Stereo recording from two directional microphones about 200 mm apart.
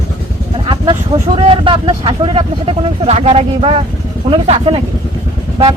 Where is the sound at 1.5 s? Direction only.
25° right (ahead or behind).